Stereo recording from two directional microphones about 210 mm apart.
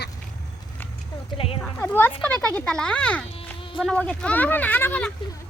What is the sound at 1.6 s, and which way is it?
A child's voice, 10° left (ahead or behind).